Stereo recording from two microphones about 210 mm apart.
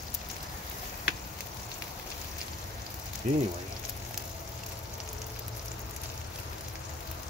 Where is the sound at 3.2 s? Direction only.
35° right (ahead or behind).